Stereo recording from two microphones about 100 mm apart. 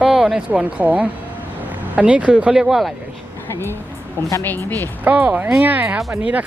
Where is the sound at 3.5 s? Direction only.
25° left (ahead or behind).